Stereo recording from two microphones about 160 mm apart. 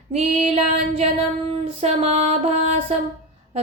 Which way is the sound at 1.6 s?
40° right (ahead or behind).